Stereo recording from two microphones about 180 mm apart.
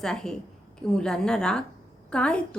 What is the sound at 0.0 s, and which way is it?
A woman's voice, 5° left (ahead or behind).